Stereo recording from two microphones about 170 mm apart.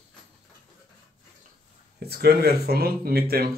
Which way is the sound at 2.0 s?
70° right (ahead or behind).